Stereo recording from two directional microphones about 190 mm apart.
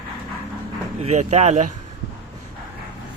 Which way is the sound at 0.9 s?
35° right (ahead or behind).